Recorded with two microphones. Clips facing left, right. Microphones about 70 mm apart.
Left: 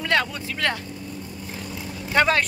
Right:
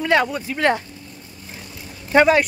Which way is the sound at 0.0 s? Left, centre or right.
Centre.